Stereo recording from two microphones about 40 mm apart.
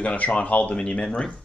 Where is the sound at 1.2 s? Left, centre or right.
Centre.